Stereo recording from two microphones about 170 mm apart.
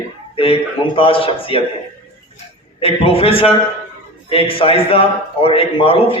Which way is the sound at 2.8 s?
35° left (ahead or behind).